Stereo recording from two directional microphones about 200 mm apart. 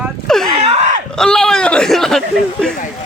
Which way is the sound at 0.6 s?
30° right (ahead or behind).